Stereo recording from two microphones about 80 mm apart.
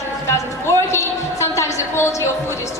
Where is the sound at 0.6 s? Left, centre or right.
Left.